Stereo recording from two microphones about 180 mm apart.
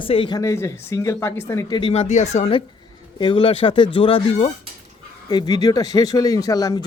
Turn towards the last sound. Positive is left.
turn(degrees=20)  # may be behind; listen again after turning